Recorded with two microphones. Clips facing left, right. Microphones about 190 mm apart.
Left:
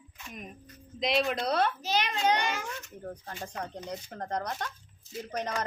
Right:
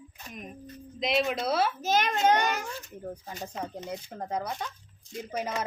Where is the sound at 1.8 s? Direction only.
50° right (ahead or behind).